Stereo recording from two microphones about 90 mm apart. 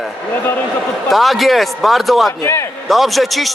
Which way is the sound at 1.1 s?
Centre (ahead or behind).